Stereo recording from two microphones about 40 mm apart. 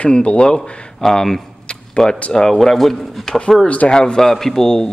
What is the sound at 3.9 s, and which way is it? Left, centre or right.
Speech, left.